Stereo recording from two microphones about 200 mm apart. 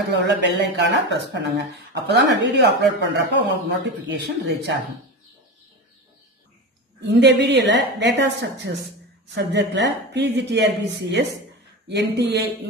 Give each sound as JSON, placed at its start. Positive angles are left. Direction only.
{"t": 0.1, "sound": "speech", "side_deg": -60}
{"t": 7.0, "sound": "speech", "side_deg": -60}